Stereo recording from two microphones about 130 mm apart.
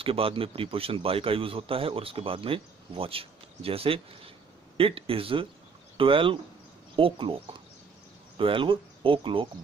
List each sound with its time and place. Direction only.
0.0 s a man's voice: 45° right (ahead or behind)